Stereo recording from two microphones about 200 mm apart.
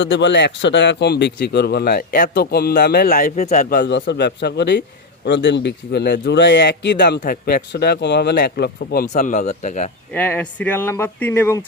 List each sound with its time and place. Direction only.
0.0 s a man's voice: 65° left (ahead or behind)
7.2 s a man's voice: 50° left (ahead or behind)
10.1 s speech: 10° left (ahead or behind)